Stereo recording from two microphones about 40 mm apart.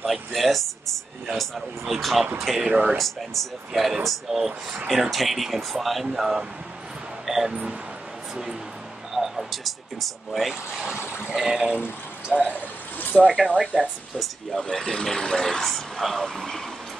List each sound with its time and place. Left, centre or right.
0.0 s speech: centre
2.7 s speech: right
3.0 s speech: centre
4.4 s speech: centre
4.8 s speech: centre
6.1 s speech: centre
9.1 s speech: centre
12.3 s speech: right
13.1 s speech: centre
13.5 s speech: right
14.1 s speech: centre
14.6 s speech: centre
15.6 s speech: centre